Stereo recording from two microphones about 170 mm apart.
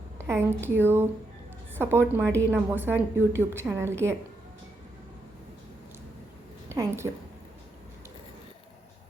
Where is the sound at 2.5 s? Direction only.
10° right (ahead or behind).